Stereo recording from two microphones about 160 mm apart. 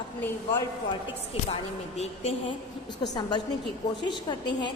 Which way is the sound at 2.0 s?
40° left (ahead or behind).